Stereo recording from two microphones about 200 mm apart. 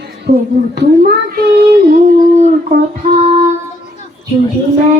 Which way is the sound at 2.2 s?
45° right (ahead or behind).